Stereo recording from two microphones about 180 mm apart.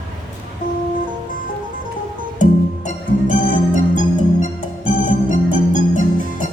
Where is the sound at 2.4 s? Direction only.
45° left (ahead or behind).